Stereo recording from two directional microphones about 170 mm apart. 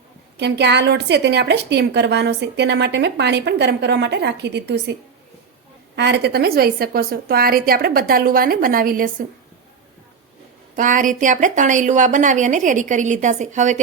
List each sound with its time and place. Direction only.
0.3 s a woman's voice: 90° right
6.0 s a woman's voice: 85° right; by 9.2 s 55° right (ahead or behind)
10.8 s a woman's voice: 50° right (ahead or behind)